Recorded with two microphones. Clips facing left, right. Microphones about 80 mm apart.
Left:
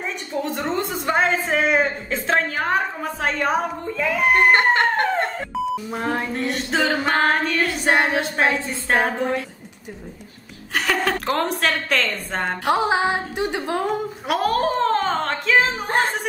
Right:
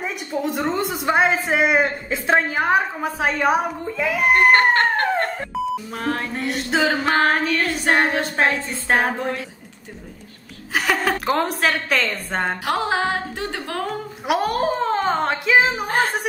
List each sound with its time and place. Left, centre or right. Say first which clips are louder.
0.3 s speech: right 2 dB; centre
4.5 s a woman's voice: right 1 dB; centre
5.9 s music: left 1 dB; centre
6.3 s singing: even; centre
7.9 s music: right 1 dB; centre
8.2 s singing: even; centre
10.7 s a woman's voice: right 1 dB; centre
12.6 s a woman's voice: left 5 dB; centre
14.2 s speech: right 1 dB; centre